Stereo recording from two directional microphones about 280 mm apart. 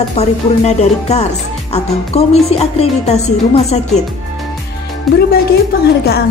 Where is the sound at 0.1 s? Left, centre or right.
Left.